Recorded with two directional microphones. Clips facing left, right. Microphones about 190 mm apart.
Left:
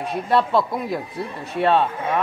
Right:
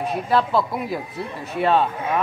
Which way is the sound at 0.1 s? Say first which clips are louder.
Left 2 dB; centre (ahead or behind).